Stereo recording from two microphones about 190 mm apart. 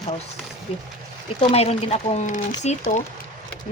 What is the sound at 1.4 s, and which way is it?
Speech, 35° left (ahead or behind).